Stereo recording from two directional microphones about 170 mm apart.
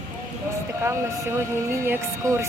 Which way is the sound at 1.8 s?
15° right (ahead or behind).